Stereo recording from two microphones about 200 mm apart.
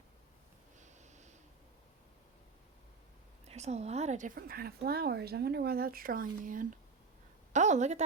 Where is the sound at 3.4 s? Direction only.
35° right (ahead or behind).